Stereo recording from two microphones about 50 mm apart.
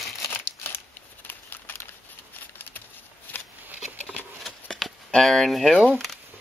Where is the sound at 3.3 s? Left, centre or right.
Left.